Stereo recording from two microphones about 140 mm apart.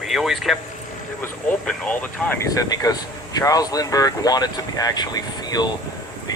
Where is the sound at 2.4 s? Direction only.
25° left (ahead or behind).